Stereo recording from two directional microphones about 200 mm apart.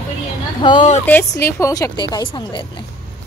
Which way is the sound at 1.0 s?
10° left (ahead or behind).